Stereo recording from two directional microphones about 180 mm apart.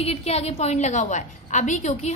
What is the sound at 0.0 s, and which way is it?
A woman's voice, 35° left (ahead or behind).